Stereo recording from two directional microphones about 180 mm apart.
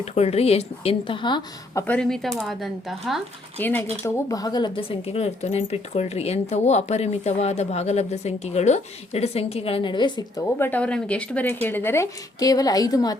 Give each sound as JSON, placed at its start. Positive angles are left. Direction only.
{"t": 0.0, "sound": "speech", "side_deg": 35}
{"t": 1.9, "sound": "speech", "side_deg": 5}
{"t": 3.6, "sound": "speech", "side_deg": 10}